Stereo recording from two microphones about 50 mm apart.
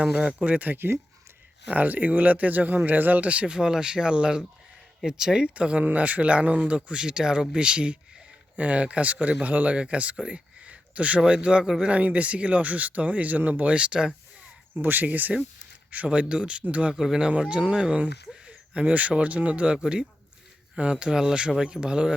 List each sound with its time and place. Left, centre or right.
0.1 s speech: right
11.9 s speech: right
14.8 s speech: right
16.0 s speech: right